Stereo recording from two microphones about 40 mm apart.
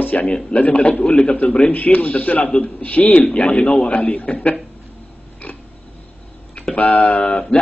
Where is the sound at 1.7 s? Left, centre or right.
Left.